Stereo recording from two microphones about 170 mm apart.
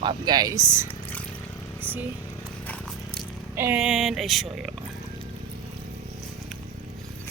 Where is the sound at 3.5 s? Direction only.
15° right (ahead or behind).